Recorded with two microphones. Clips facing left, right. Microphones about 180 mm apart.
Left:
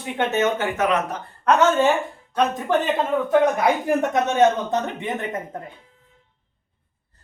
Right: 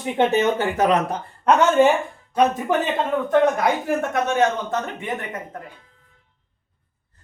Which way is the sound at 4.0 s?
20° left (ahead or behind).